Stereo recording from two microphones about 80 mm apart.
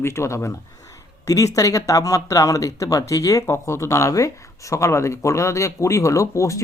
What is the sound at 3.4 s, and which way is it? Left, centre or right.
Speech, left.